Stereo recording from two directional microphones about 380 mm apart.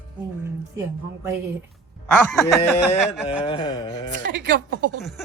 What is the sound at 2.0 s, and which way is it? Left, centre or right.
Speech, centre.